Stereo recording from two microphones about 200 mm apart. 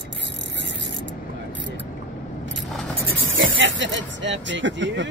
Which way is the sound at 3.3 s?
70° right (ahead or behind).